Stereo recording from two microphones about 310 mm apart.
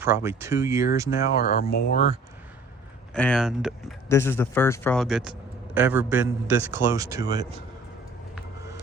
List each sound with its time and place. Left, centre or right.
0.0 s a man's voice: centre
1.4 s speech: left
3.2 s a man's voice: centre